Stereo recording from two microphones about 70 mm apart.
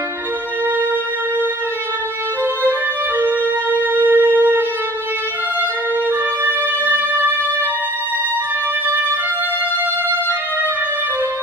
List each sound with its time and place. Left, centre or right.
3.2 s music: right
6.9 s music: right